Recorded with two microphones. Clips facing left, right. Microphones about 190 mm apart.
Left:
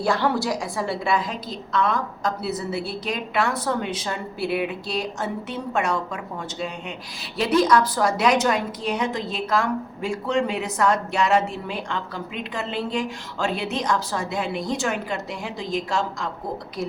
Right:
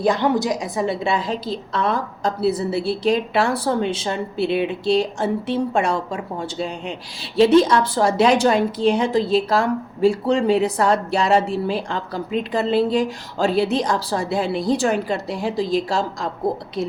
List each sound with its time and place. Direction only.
0.0 s a woman's voice: 20° right (ahead or behind); by 16.3 s 35° right (ahead or behind)